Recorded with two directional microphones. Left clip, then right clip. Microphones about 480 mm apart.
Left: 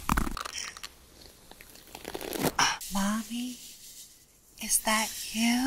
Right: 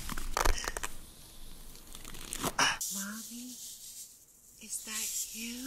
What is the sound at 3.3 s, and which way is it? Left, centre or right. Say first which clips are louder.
Speech: left 11 dB; left.